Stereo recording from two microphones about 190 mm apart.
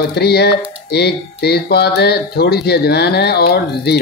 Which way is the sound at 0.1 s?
60° left (ahead or behind).